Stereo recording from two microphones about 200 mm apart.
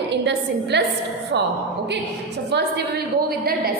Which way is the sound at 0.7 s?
60° right (ahead or behind).